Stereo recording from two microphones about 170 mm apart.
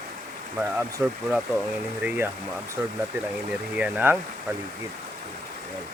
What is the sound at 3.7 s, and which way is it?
Speech, 10° right (ahead or behind).